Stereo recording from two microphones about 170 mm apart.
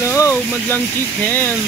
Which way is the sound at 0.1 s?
15° left (ahead or behind).